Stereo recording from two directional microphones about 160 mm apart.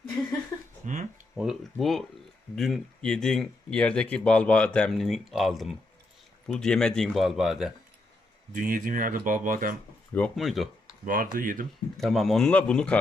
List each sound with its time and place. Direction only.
0.8 s a sound: 50° right (ahead or behind)
1.4 s speech: centre (ahead or behind)
8.5 s speech: 60° right (ahead or behind)
10.2 s speech: 5° left (ahead or behind)
11.0 s speech: 60° right (ahead or behind)
11.9 s speech: centre (ahead or behind)